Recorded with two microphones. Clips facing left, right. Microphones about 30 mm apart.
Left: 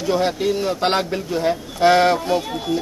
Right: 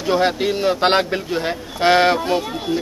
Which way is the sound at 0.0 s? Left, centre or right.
Right.